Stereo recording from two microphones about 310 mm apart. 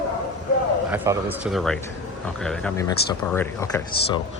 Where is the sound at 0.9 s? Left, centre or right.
Centre.